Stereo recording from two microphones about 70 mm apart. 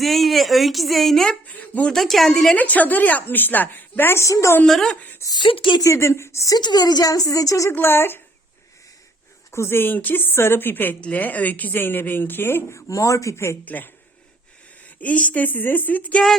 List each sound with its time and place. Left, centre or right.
0.0 s speech: centre
1.5 s a sound: left
1.9 s a woman's voice: centre
2.6 s a woman's voice: left
4.2 s speech: left
4.6 s speech: centre
5.3 s speech: left
5.8 s speech: left
6.6 s a woman's voice: left
7.7 s a woman's voice: left
9.5 s a woman's voice: left
12.9 s speech: left
13.7 s a woman's voice: left